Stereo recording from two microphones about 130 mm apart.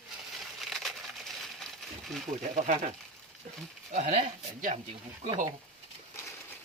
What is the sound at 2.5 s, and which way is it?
Speech, 65° right (ahead or behind).